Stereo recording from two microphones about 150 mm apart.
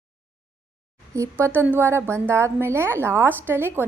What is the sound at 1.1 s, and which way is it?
A woman's voice, 20° right (ahead or behind).